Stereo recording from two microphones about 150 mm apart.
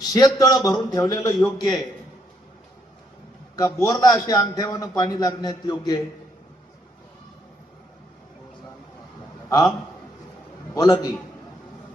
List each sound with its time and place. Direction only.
0.0 s a man's voice: 25° left (ahead or behind)
3.5 s a man's voice: 25° left (ahead or behind)
9.5 s a man's voice: 25° left (ahead or behind)
10.8 s a man's voice: 25° left (ahead or behind)